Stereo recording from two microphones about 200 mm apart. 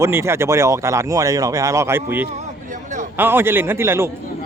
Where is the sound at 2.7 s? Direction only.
40° right (ahead or behind).